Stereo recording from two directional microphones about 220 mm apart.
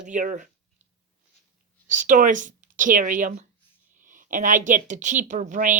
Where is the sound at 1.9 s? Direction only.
35° right (ahead or behind).